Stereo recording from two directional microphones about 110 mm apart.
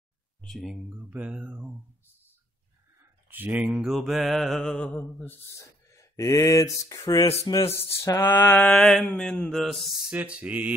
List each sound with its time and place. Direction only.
0.4 s speech: centre (ahead or behind)
0.8 s speech: 10° right (ahead or behind)
3.0 s a sound: 15° right (ahead or behind); by 5.3 s 10° left (ahead or behind)
5.6 s speech: 30° left (ahead or behind); by 10.1 s centre (ahead or behind)
10.1 s speech: 15° right (ahead or behind)